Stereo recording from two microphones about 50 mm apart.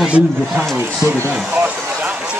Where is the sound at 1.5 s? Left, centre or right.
Right.